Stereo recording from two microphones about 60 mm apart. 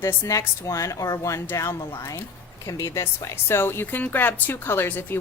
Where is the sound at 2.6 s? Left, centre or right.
Left.